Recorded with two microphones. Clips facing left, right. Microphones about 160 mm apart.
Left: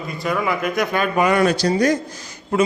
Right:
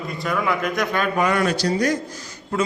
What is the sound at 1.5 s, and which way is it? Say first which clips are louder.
A man's voice: left 3 dB; 25° left (ahead or behind).